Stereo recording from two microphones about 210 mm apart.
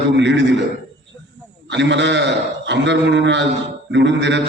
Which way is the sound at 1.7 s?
55° right (ahead or behind).